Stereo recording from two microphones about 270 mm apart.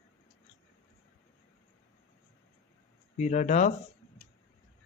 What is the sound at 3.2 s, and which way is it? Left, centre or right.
Speech, left.